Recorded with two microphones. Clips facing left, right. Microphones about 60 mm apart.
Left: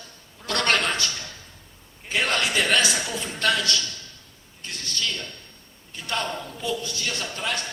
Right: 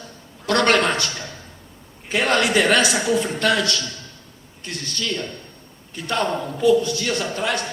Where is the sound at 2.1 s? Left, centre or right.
Right.